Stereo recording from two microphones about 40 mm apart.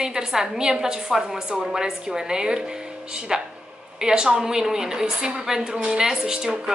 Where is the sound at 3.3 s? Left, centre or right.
Centre.